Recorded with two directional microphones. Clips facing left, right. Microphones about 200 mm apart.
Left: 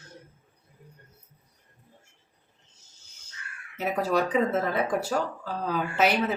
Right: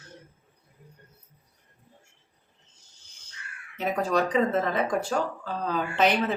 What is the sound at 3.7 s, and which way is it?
Crow, 5° left (ahead or behind).